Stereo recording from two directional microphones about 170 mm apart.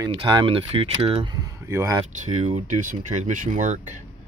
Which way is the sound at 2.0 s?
45° right (ahead or behind).